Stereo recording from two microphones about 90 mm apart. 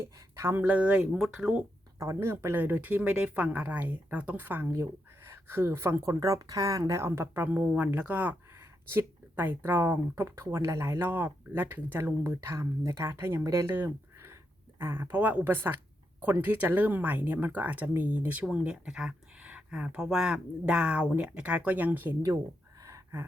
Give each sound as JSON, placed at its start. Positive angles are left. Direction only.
{"t": 0.0, "sound": "speech", "side_deg": -30}
{"t": 2.0, "sound": "speech", "side_deg": -30}
{"t": 22.8, "sound": "a sound", "side_deg": -35}